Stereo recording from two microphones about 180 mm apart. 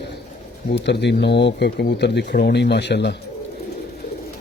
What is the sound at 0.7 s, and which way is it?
Speech, 70° left (ahead or behind).